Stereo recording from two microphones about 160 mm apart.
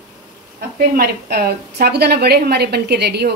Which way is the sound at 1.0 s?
80° right.